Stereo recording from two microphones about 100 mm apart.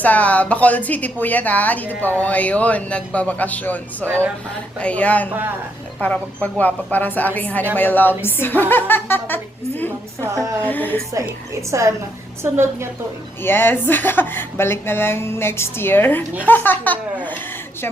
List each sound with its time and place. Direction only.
0.0 s a woman's voice: 15° left (ahead or behind)
4.0 s a woman's voice: 25° right (ahead or behind)
4.8 s a woman's voice: 15° left (ahead or behind)
5.3 s a woman's voice: 20° right (ahead or behind)
6.0 s a woman's voice: 15° left (ahead or behind)
11.7 s a woman's voice: 30° right (ahead or behind)
13.4 s a woman's voice: 20° left (ahead or behind)